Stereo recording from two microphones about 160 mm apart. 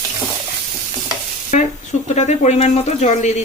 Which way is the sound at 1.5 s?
50° left (ahead or behind).